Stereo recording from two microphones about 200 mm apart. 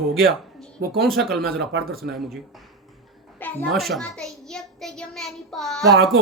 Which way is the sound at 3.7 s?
Centre (ahead or behind).